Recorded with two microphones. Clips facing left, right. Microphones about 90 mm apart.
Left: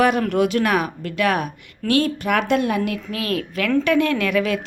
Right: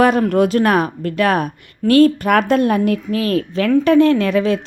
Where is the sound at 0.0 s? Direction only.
40° right (ahead or behind).